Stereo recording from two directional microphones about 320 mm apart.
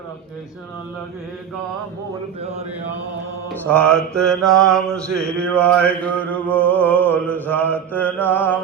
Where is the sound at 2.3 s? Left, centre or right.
Centre.